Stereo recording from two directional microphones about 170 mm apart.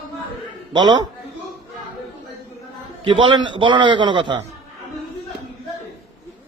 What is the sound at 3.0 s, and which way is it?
A man's voice, 30° right (ahead or behind).